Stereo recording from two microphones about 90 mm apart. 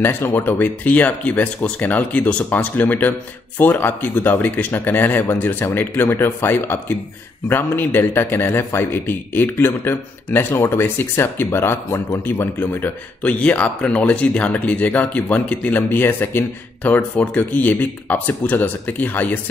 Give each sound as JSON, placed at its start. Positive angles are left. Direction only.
{"t": 0.0, "sound": "a man's voice", "side_deg": 20}